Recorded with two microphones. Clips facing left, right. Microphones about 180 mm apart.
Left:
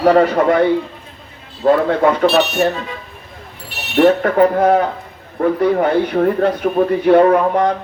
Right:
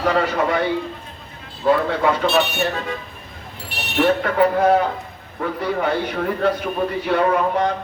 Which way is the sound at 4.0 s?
50° left (ahead or behind).